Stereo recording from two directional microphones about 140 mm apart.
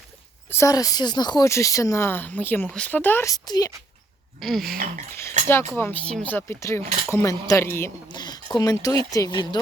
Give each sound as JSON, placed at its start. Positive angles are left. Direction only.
{"t": 0.5, "sound": "speech", "side_deg": 25}
{"t": 3.3, "sound": "speech", "side_deg": 30}
{"t": 4.4, "sound": "a sound", "side_deg": 0}
{"t": 5.4, "sound": "speech", "side_deg": -60}
{"t": 5.7, "sound": "speech", "side_deg": 10}
{"t": 8.0, "sound": "a sound", "side_deg": 30}
{"t": 8.5, "sound": "speech", "side_deg": 25}